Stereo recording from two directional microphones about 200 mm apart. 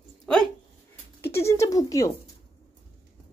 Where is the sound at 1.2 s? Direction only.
15° left (ahead or behind).